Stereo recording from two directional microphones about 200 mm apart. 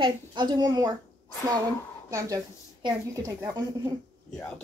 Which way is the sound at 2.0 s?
15° right (ahead or behind).